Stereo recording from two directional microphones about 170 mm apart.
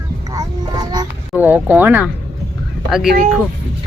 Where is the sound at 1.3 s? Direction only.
10° right (ahead or behind).